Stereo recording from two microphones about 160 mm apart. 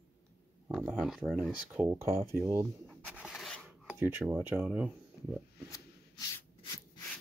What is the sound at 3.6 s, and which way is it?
Filing, 15° right (ahead or behind).